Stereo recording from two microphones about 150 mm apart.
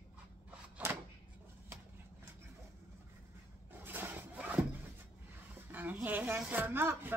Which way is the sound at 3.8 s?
15° right (ahead or behind).